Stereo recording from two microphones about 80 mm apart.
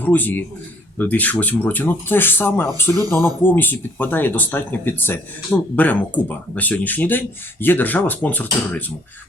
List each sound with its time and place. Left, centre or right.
0.0 s speech: left